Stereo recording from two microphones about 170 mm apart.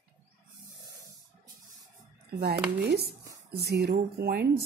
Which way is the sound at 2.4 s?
70° right (ahead or behind).